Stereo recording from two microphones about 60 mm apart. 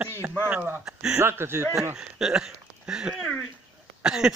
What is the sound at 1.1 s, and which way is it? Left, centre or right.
Speech, right.